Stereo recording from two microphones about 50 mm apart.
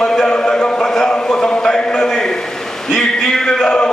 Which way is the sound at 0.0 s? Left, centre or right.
Centre.